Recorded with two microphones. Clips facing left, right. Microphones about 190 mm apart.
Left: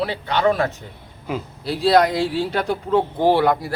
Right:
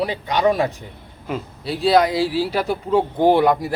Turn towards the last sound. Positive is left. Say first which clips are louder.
# right 2 dB
turn(degrees=-15)  # may be behind; listen again after turning